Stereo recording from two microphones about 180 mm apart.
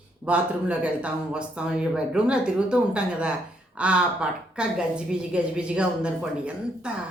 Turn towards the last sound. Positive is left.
turn(degrees=-5)  # may be behind; listen again after turning